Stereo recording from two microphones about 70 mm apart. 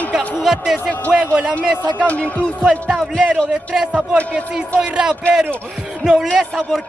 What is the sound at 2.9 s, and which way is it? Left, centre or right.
Speech, centre.